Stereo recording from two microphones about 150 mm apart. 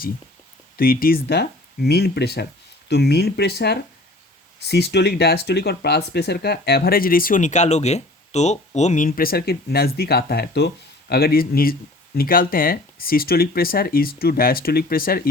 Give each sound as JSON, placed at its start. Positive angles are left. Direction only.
{"t": 0.8, "sound": "speech", "side_deg": 75}